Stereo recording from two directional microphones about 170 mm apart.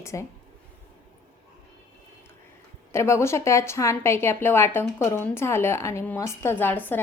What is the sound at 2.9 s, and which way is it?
Speech, 15° left (ahead or behind).